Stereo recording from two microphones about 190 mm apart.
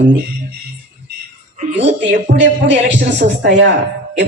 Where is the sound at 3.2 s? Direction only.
70° right (ahead or behind).